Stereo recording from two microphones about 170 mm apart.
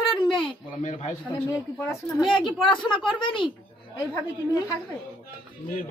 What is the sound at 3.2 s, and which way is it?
Speech, 30° left (ahead or behind).